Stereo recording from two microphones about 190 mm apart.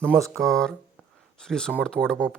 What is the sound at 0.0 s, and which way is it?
Speech, 15° right (ahead or behind).